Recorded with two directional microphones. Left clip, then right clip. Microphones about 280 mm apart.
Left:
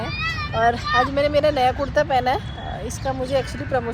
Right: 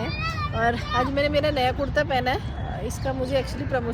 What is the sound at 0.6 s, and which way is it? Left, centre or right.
A woman's voice, centre.